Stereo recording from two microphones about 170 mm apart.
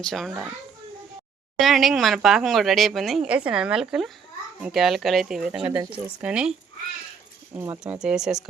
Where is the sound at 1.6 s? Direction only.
Centre (ahead or behind).